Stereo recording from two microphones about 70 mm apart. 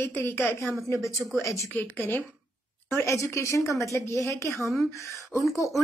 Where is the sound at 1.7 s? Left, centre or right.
Left.